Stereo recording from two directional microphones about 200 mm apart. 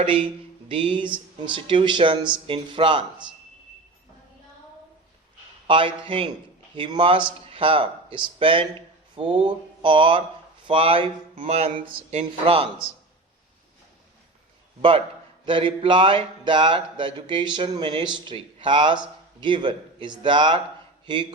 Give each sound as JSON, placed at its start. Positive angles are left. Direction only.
{"t": 0.0, "sound": "speech", "side_deg": -25}
{"t": 5.6, "sound": "speech", "side_deg": -25}
{"t": 11.3, "sound": "a sound", "side_deg": -30}
{"t": 12.2, "sound": "speech", "side_deg": -25}
{"t": 14.8, "sound": "speech", "side_deg": -25}